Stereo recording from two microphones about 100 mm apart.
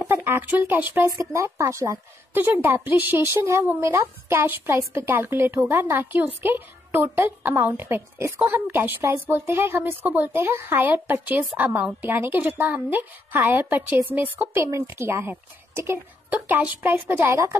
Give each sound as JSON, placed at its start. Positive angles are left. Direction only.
{"t": 0.1, "sound": "speech", "side_deg": -20}
{"t": 1.0, "sound": "a woman's voice", "side_deg": -30}
{"t": 14.6, "sound": "a woman's voice", "side_deg": -30}